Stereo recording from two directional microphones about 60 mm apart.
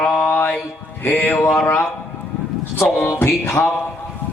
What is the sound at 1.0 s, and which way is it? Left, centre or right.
Music, left.